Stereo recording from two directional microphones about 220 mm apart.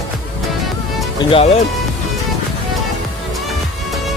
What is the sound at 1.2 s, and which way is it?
Speech, 25° left (ahead or behind).